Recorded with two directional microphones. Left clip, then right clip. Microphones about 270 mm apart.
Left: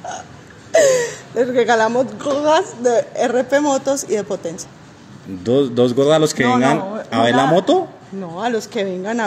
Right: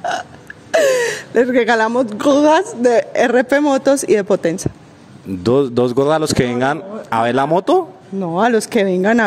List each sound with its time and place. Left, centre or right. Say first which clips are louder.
0.7 s speech: even; right